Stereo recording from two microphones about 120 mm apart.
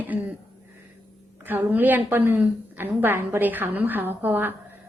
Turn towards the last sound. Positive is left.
turn(degrees=-15)  # may be behind; listen again after turning